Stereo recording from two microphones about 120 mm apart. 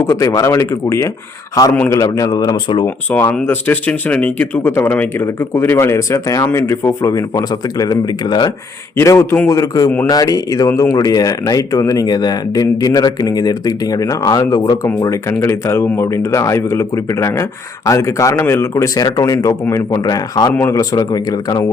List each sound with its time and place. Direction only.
0.1 s speech: 30° left (ahead or behind)
2.8 s speech: 15° left (ahead or behind); by 8.5 s 35° left (ahead or behind)
9.0 s speech: 20° left (ahead or behind)
20.5 s speech: 15° left (ahead or behind)
20.7 s speech: 30° left (ahead or behind)